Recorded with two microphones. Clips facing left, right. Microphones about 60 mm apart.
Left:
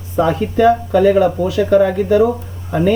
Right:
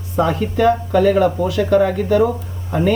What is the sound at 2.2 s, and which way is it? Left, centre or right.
Speech, centre.